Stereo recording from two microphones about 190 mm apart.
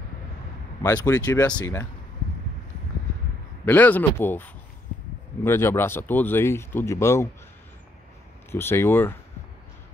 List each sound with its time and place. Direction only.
0.8 s speech: 20° left (ahead or behind)
3.6 s speech: 10° left (ahead or behind)
8.5 s speech: 10° left (ahead or behind)